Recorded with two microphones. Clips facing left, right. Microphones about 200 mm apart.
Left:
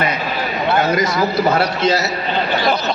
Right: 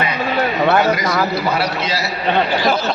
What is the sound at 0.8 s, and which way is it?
A man's voice, 45° left (ahead or behind).